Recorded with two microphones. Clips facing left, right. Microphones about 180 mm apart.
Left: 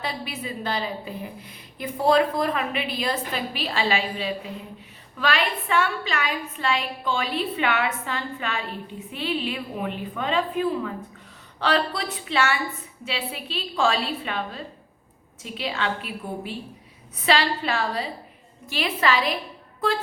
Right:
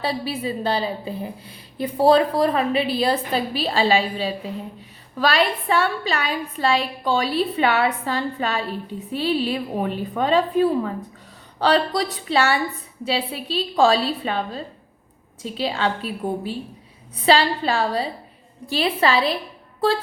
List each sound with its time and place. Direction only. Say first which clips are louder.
0.0 s a woman's voice: right 7 dB; 35° right (ahead or behind)